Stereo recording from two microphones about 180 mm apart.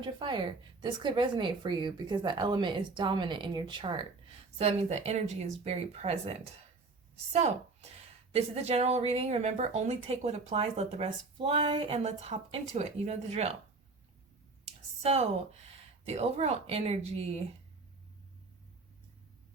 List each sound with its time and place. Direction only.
0.0 s a woman's voice: 25° right (ahead or behind)
14.6 s a sound: 35° right (ahead or behind)
16.0 s a woman's voice: 35° right (ahead or behind)